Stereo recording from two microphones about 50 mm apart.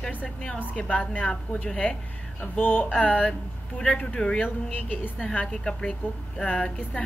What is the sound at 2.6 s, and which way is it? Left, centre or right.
A woman's voice, left.